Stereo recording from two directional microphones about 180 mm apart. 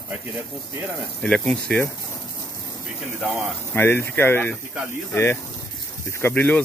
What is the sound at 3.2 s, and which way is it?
Speech, centre (ahead or behind).